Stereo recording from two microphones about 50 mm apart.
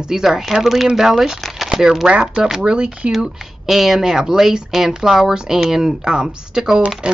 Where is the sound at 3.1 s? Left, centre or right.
Centre.